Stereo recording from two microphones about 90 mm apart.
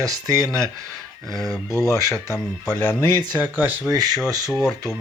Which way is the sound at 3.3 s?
20° right (ahead or behind).